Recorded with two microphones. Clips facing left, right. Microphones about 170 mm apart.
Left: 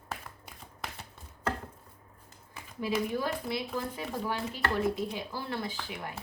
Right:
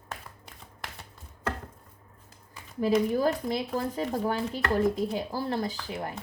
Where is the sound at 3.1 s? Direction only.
40° right (ahead or behind).